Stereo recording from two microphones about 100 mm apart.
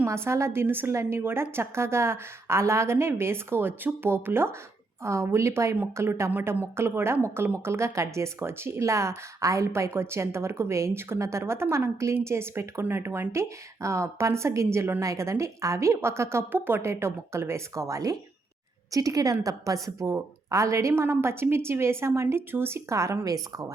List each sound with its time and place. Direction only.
0.0 s a woman's voice: 25° right (ahead or behind)